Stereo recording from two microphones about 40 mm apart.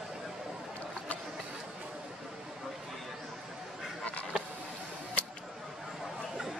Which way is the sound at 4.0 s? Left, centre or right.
Left.